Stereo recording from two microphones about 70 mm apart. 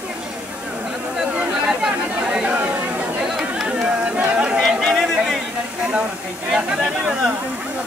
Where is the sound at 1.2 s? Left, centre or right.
Centre.